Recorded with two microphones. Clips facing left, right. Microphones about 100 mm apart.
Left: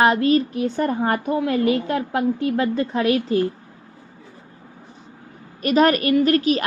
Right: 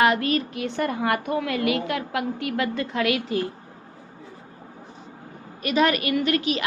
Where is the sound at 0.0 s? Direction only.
30° left (ahead or behind).